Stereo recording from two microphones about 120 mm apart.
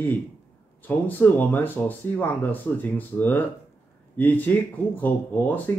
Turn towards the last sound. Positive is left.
turn(degrees=15)  # may be behind; listen again after turning